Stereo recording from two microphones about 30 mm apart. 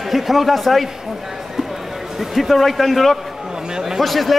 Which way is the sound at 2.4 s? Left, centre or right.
Centre.